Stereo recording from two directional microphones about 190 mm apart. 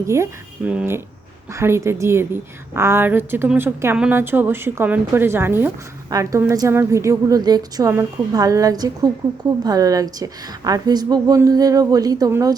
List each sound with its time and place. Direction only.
0.1 s a woman's voice: 10° right (ahead or behind)